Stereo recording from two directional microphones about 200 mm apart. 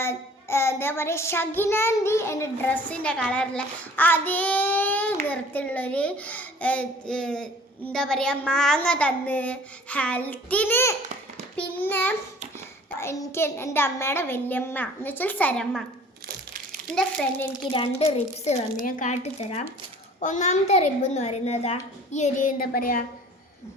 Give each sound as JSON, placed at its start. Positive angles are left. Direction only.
{"t": 0.0, "sound": "child singing", "side_deg": 15}
{"t": 16.9, "sound": "a child's voice", "side_deg": 5}
{"t": 17.7, "sound": "a woman's voice", "side_deg": 25}